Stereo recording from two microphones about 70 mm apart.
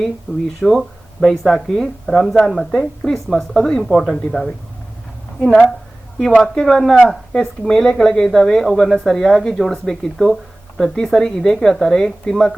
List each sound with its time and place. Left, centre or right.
0.3 s speech: centre
0.6 s speech: centre